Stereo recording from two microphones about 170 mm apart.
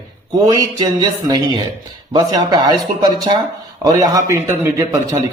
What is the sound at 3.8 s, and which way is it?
A man's voice, 20° right (ahead or behind).